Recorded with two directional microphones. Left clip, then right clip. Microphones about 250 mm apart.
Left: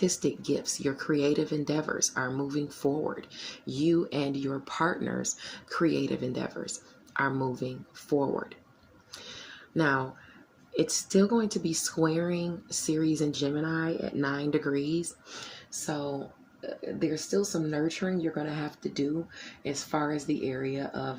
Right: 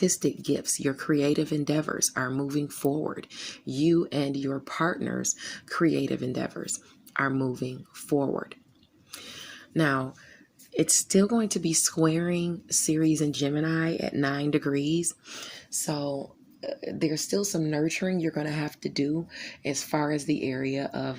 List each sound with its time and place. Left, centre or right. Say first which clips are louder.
0.0 s speech: right 2 dB; right
9.1 s a sound: right 2 dB; right
10.8 s speech: right 2 dB; right